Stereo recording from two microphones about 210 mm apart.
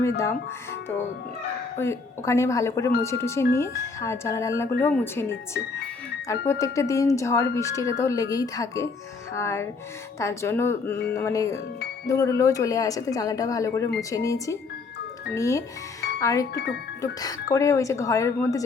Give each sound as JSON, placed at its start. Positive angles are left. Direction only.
{"t": 0.2, "sound": "speech", "side_deg": 15}